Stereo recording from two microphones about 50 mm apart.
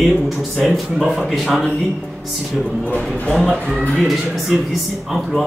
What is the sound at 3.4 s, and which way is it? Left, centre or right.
Speech, centre.